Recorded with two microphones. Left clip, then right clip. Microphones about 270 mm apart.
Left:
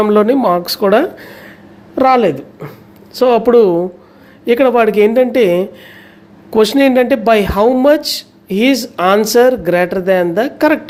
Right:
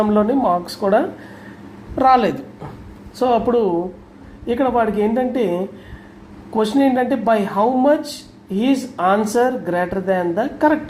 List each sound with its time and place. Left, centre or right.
0.0 s speech: left